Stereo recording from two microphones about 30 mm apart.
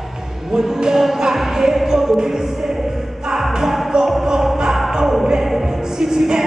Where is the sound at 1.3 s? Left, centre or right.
Centre.